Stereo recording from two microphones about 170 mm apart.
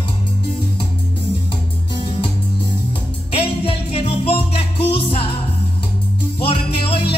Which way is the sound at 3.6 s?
35° left (ahead or behind).